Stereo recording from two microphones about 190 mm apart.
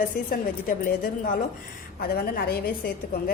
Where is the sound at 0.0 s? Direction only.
45° left (ahead or behind).